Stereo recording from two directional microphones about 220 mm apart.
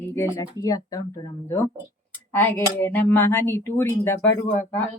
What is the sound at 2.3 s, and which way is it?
Speech, 10° left (ahead or behind).